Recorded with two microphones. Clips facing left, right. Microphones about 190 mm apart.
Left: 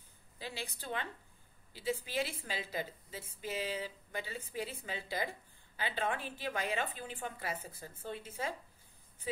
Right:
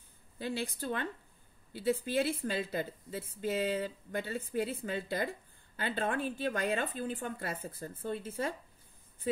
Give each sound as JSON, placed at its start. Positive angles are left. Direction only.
{"t": 0.4, "sound": "a woman's voice", "side_deg": -55}